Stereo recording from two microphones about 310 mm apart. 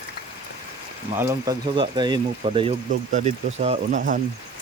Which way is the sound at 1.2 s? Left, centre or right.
Centre.